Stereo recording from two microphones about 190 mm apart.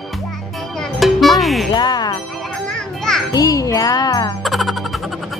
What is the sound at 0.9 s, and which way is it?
Music, centre (ahead or behind).